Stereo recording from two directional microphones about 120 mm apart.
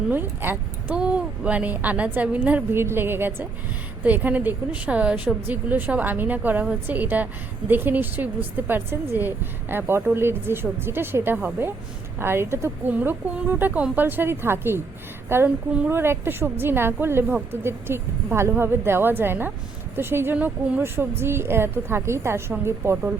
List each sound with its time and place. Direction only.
0.1 s a woman's voice: 15° right (ahead or behind)